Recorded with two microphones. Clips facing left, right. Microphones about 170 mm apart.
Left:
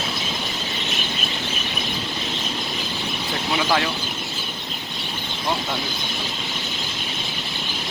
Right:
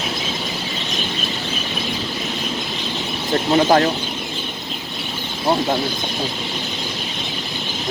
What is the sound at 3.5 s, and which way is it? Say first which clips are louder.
Speech: right 8 dB; 45° right (ahead or behind).